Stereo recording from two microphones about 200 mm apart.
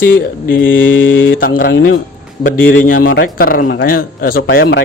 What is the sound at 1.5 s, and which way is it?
Speech, 45° left (ahead or behind).